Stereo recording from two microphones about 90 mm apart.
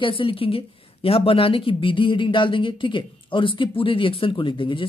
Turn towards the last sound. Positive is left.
turn(degrees=70)  # may be behind; listen again after turning